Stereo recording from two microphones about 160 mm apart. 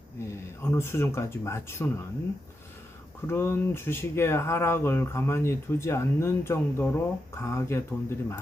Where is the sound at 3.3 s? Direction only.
15° left (ahead or behind).